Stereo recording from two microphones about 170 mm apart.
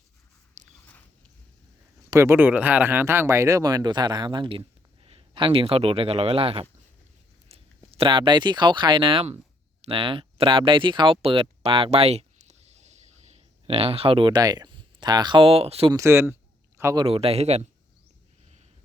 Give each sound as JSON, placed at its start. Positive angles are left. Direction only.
{"t": 0.6, "sound": "biting", "side_deg": -45}
{"t": 2.0, "sound": "speech", "side_deg": -15}
{"t": 15.9, "sound": "speech", "side_deg": -15}
{"t": 16.7, "sound": "a sound", "side_deg": -15}
{"t": 17.0, "sound": "speech", "side_deg": -35}